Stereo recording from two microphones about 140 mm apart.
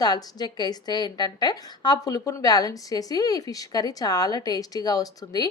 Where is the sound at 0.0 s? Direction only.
30° left (ahead or behind).